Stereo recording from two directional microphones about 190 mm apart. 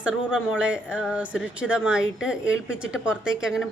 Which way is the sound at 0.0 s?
5° right (ahead or behind).